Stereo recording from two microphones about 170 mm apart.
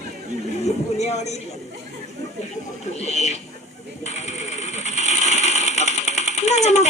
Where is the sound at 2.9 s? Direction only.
40° left (ahead or behind).